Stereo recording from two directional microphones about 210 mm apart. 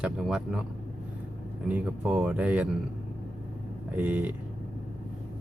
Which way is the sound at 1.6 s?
5° right (ahead or behind).